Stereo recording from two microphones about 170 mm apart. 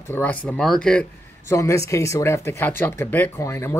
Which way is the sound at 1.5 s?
20° left (ahead or behind).